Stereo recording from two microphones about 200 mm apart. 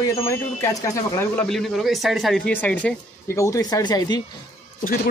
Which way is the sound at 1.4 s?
Centre (ahead or behind).